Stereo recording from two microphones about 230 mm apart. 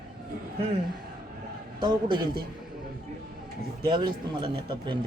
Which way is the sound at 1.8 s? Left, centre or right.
Centre.